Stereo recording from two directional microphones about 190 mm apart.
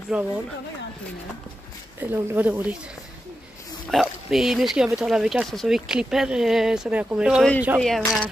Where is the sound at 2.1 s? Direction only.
10° right (ahead or behind).